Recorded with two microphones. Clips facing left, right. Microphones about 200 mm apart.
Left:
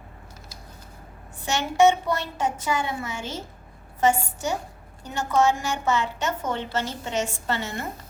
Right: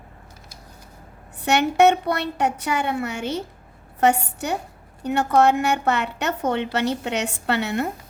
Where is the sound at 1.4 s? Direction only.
65° right (ahead or behind).